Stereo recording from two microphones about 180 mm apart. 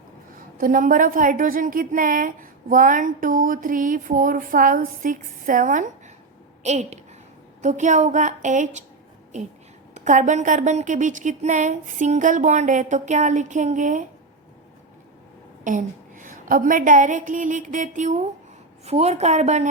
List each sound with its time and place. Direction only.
0.3 s a woman's voice: 50° right (ahead or behind)
9.9 s a woman's voice: 45° right (ahead or behind)
15.6 s a sound: 45° right (ahead or behind)
16.5 s a woman's voice: 50° right (ahead or behind)